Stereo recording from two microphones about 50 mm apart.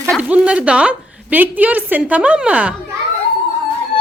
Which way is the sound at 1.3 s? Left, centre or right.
Right.